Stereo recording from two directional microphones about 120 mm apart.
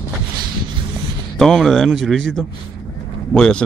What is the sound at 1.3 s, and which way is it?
Speech, centre (ahead or behind).